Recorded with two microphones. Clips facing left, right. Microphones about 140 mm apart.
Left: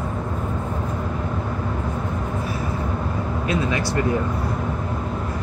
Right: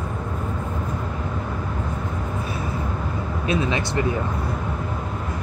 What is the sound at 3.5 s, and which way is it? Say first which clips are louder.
Speech: right 1 dB; 20° right (ahead or behind).